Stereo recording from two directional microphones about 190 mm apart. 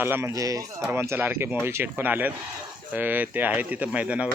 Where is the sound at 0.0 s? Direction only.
10° right (ahead or behind).